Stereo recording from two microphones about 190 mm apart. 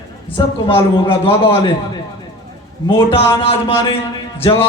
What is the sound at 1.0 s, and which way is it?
Speech, 30° left (ahead or behind).